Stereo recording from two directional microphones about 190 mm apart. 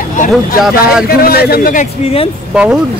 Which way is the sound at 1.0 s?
55° left (ahead or behind).